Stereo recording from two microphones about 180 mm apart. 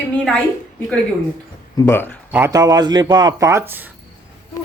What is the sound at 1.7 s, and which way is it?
Speech, 10° left (ahead or behind).